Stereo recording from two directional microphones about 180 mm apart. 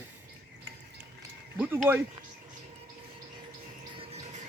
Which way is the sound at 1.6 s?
10° right (ahead or behind).